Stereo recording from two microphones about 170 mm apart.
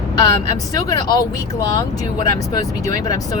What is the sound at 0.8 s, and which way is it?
Speech, 20° left (ahead or behind).